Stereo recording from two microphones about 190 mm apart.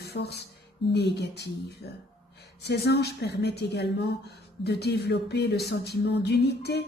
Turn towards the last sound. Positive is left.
turn(degrees=60)  # may be behind; listen again after turning